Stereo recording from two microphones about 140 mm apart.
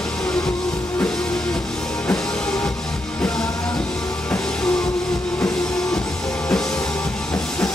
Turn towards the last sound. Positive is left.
turn(degrees=5)  # may be behind; listen again after turning